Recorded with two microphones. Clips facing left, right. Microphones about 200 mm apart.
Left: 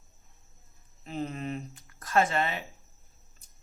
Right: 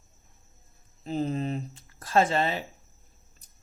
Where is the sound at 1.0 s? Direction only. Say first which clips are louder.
Right 5 dB; 30° right (ahead or behind).